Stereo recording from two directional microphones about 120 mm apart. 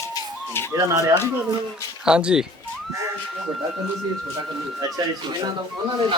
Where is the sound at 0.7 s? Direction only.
25° right (ahead or behind).